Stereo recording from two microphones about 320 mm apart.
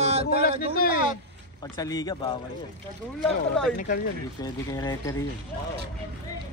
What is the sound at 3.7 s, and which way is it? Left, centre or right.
Speech, left.